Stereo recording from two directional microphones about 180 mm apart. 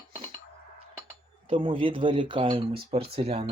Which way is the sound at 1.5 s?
30° right (ahead or behind).